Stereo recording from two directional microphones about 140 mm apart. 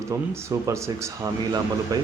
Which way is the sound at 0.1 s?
20° right (ahead or behind).